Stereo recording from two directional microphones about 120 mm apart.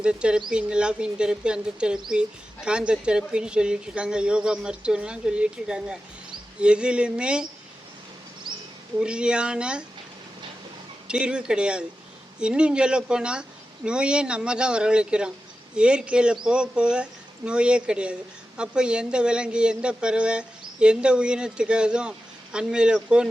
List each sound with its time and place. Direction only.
0.0 s speech: 10° right (ahead or behind)
8.5 s a sound: 40° right (ahead or behind)
9.0 s speech: 10° right (ahead or behind)
11.1 s speech: 5° right (ahead or behind)